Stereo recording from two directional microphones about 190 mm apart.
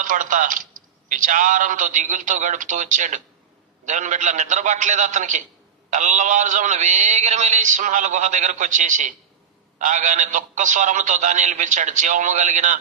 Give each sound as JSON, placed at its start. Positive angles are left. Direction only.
{"t": 0.0, "sound": "a man's voice", "side_deg": -40}